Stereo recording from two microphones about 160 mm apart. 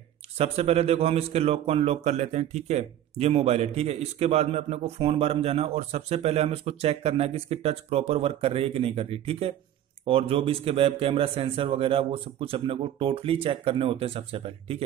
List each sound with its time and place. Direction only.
0.4 s a man's voice: 40° right (ahead or behind)